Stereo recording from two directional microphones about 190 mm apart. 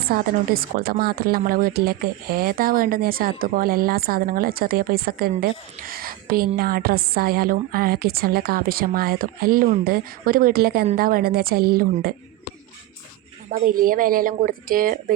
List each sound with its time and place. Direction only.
0.1 s speech: 55° right (ahead or behind)
13.5 s speech: 45° right (ahead or behind)